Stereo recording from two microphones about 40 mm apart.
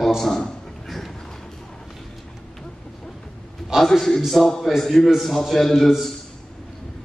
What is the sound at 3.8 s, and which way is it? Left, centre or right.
A man's voice, centre.